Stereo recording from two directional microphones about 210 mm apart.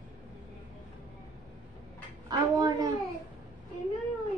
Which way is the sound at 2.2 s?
20° right (ahead or behind).